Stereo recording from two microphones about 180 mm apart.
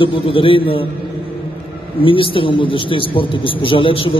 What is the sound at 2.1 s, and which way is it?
A man's voice, 30° left (ahead or behind).